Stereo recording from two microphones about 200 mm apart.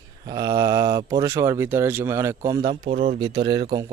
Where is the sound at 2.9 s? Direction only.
45° right (ahead or behind).